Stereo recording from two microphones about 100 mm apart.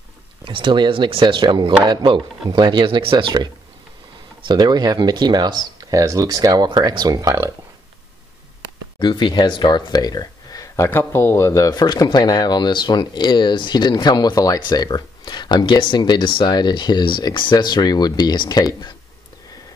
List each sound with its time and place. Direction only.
0.5 s speech: 55° right (ahead or behind)
4.5 s speech: 50° right (ahead or behind); by 7.5 s 30° right (ahead or behind)
9.0 s speech: 50° left (ahead or behind)
10.9 s speech: 25° left (ahead or behind); by 18.6 s 45° left (ahead or behind)